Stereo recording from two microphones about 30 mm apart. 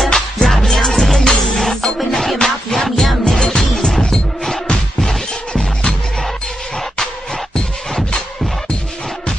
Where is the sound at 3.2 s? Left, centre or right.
Centre.